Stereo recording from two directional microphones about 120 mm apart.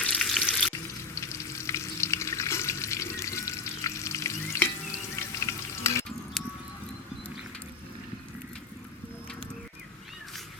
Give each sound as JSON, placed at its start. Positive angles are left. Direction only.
{"t": 0.0, "sound": "frying", "side_deg": 5}
{"t": 1.1, "sound": "frying", "side_deg": 25}
{"t": 6.4, "sound": "music", "side_deg": 5}